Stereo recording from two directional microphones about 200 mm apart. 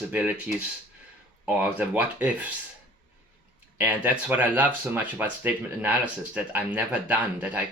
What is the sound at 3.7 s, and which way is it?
Speech, 10° right (ahead or behind).